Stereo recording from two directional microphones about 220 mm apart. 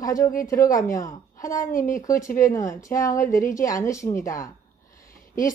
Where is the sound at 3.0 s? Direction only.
35° left (ahead or behind).